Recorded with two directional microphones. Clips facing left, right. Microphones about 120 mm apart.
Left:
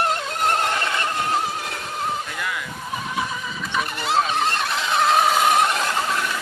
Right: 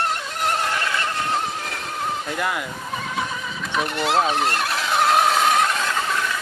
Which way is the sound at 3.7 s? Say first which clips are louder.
Right 2 dB; centre (ahead or behind).